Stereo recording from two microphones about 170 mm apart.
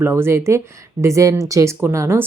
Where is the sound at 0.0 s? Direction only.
15° right (ahead or behind).